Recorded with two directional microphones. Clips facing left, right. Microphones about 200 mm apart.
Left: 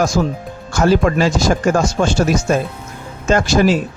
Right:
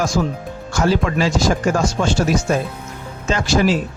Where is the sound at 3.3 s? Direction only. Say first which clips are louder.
Left 4 dB; 50° left (ahead or behind).